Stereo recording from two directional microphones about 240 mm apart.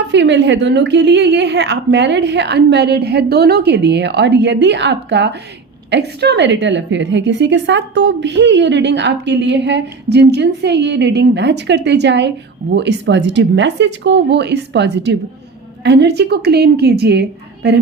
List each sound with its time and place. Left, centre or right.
0.1 s a woman's voice: right